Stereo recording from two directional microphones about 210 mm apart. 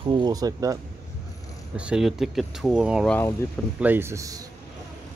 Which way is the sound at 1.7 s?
5° right (ahead or behind).